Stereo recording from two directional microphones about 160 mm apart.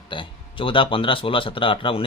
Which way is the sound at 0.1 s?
30° left (ahead or behind).